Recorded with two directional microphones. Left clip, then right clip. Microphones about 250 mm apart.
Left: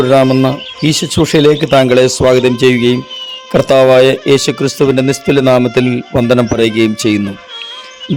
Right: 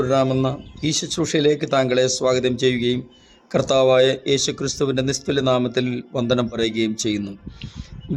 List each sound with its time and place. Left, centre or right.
0.0 s speech: left